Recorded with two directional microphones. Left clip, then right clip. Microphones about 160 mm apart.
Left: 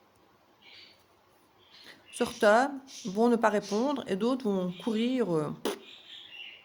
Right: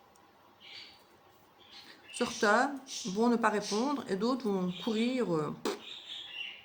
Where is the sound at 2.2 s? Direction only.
65° left (ahead or behind).